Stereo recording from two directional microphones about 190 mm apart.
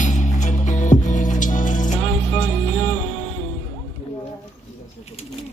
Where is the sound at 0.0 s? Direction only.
40° left (ahead or behind).